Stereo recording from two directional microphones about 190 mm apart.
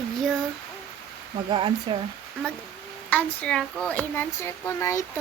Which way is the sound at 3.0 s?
5° left (ahead or behind).